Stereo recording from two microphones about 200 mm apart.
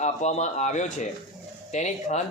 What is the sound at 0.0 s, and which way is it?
Speech, 35° left (ahead or behind).